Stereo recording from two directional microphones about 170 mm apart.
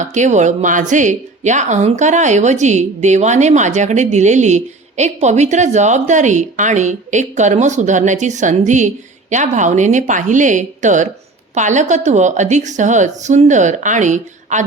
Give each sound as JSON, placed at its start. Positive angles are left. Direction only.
{"t": 0.0, "sound": "a woman's voice", "side_deg": -45}